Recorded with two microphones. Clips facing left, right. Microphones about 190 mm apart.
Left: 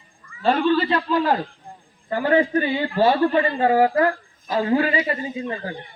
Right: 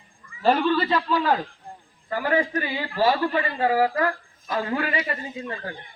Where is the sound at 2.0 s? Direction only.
25° left (ahead or behind).